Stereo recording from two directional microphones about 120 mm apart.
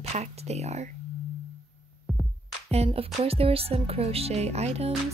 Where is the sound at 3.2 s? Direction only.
55° right (ahead or behind).